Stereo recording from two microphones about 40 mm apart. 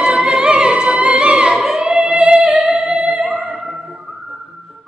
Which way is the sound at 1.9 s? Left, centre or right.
Right.